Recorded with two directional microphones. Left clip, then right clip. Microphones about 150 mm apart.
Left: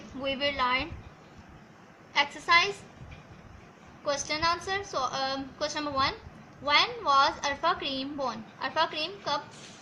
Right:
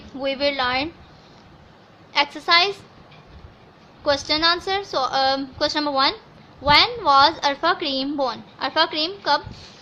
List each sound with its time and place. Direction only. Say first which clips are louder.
0.2 s a woman's voice: right 7 dB; 55° right (ahead or behind)
2.1 s a woman's voice: right 6 dB; 60° right (ahead or behind)
4.0 s a woman's voice: right 9 dB; 60° right (ahead or behind)